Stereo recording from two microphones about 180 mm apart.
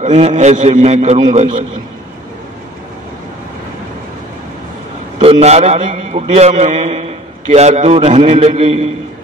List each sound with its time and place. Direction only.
0.0 s a man's voice: 40° right (ahead or behind)
5.2 s a man's voice: 35° right (ahead or behind)